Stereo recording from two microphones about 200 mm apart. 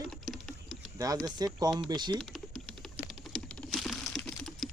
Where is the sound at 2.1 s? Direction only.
Centre (ahead or behind).